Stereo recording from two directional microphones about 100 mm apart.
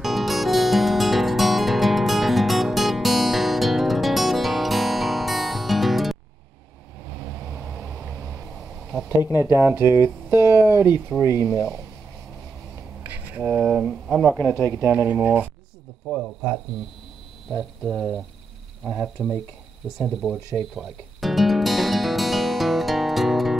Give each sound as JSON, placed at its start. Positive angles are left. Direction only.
{"t": 0.0, "sound": "music", "side_deg": 0}
{"t": 7.1, "sound": "vehicle", "side_deg": -5}
{"t": 9.2, "sound": "speech", "side_deg": -25}
{"t": 13.1, "sound": "a sound", "side_deg": -15}
{"t": 13.5, "sound": "speech", "side_deg": -5}
{"t": 14.6, "sound": "speech", "side_deg": 10}
{"t": 14.9, "sound": "speech", "side_deg": -15}
{"t": 16.1, "sound": "speech", "side_deg": 0}
{"t": 20.7, "sound": "music", "side_deg": 0}